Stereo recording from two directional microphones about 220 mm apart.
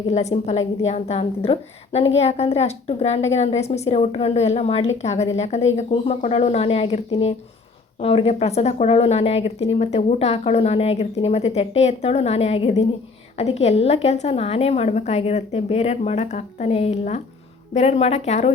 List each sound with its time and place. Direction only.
0.1 s a woman's voice: 30° left (ahead or behind)